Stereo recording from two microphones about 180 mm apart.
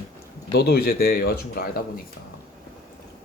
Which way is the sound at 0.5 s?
60° left (ahead or behind).